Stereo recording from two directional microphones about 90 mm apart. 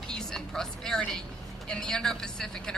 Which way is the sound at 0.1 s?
5° left (ahead or behind).